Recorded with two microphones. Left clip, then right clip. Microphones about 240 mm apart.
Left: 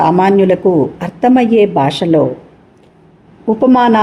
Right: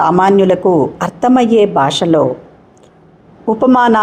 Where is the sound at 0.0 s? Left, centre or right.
Centre.